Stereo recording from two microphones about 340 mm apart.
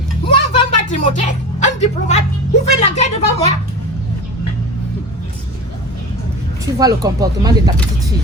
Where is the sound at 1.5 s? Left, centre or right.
Centre.